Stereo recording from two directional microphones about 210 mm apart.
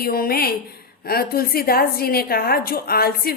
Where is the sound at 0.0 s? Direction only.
45° left (ahead or behind).